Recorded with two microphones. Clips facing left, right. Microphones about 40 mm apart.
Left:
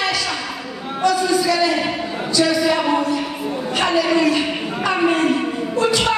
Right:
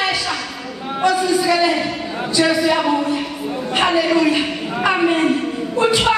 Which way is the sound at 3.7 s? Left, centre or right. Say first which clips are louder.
Right 2 dB; right.